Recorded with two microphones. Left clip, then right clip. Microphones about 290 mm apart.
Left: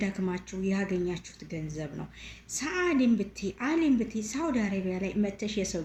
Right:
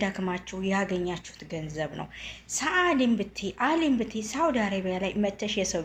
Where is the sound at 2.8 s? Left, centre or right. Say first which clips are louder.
Right 2 dB; right.